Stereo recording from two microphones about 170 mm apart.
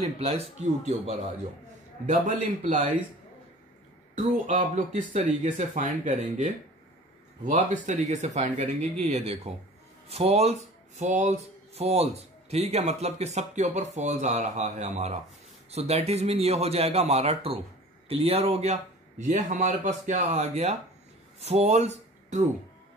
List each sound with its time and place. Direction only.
0.2 s speech: 35° right (ahead or behind)
4.2 s speech: 40° right (ahead or behind)